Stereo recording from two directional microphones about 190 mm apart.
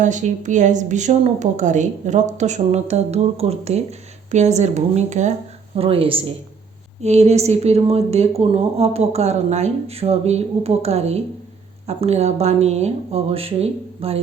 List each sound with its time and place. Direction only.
0.0 s a woman's voice: 40° right (ahead or behind)